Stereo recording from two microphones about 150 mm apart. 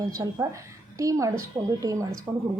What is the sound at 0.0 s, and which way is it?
Speech, 25° right (ahead or behind).